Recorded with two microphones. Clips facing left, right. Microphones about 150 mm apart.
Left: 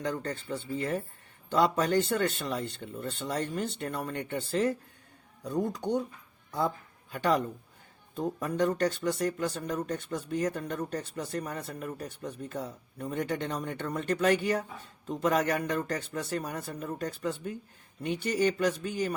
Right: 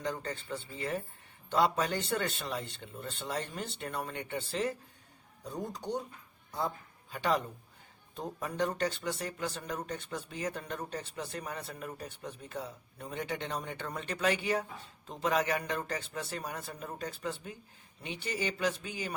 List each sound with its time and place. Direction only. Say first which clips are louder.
0.0 s speech: left 4 dB; 50° left (ahead or behind)
5.7 s speech: left 6 dB; 55° left (ahead or behind)
7.1 s speech: left 4 dB; 50° left (ahead or behind)